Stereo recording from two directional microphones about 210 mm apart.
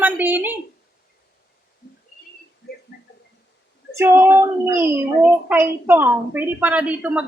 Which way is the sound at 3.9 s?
10° right (ahead or behind).